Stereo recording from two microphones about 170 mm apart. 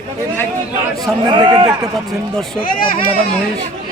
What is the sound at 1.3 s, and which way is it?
Speech, 30° right (ahead or behind).